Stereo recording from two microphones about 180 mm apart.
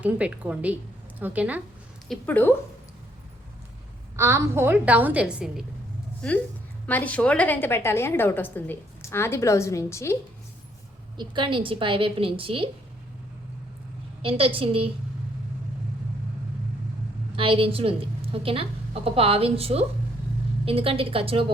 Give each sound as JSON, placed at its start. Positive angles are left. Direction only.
{"t": 0.0, "sound": "a woman's voice", "side_deg": -10}
{"t": 2.0, "sound": "a woman's voice", "side_deg": 10}
{"t": 4.2, "sound": "a woman's voice", "side_deg": -15}
{"t": 6.8, "sound": "a woman's voice", "side_deg": 10}
{"t": 11.2, "sound": "a woman's voice", "side_deg": -25}
{"t": 14.2, "sound": "a woman's voice", "side_deg": -30}
{"t": 17.3, "sound": "a woman's voice", "side_deg": -30}